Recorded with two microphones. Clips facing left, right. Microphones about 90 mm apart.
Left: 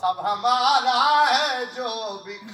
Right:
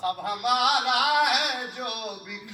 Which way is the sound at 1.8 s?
20° left (ahead or behind).